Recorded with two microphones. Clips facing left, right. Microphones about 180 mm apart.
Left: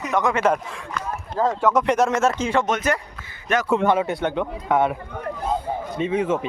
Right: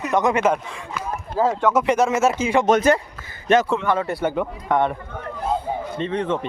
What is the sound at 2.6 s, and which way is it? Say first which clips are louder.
Speech: right 6 dB; 35° right (ahead or behind).